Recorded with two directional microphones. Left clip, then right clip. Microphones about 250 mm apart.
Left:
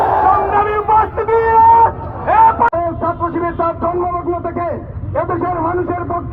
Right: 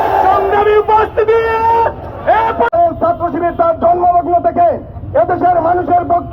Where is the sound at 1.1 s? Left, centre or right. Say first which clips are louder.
Even; centre.